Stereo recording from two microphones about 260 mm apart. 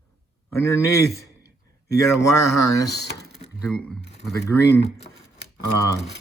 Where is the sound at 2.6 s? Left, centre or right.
Centre.